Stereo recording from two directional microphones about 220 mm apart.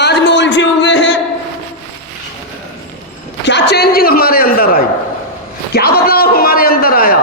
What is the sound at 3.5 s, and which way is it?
A man's voice, 50° left (ahead or behind).